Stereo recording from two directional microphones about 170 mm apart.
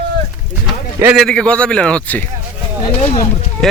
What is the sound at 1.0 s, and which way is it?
A man's voice, centre (ahead or behind).